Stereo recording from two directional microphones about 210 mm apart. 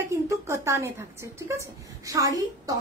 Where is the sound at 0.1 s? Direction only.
15° right (ahead or behind).